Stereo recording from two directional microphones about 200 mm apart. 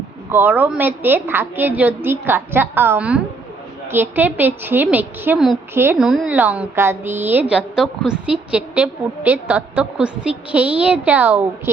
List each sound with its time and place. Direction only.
0.3 s a woman's voice: 10° right (ahead or behind)